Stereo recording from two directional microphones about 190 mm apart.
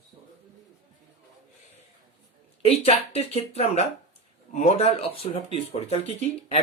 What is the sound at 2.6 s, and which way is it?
Speech, 30° left (ahead or behind).